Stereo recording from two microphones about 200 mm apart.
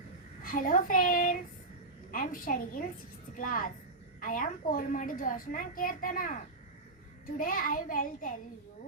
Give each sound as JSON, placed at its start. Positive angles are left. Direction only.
{"t": 0.4, "sound": "a woman's voice", "side_deg": 45}